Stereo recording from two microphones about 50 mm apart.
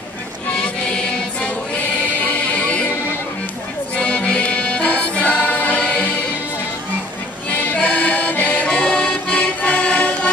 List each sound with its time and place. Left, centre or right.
0.5 s music: left
3.9 s music: left
7.5 s accordion: left